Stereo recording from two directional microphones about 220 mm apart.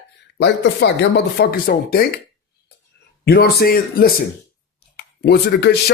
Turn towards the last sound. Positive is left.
turn(degrees=45)  # may be behind; listen again after turning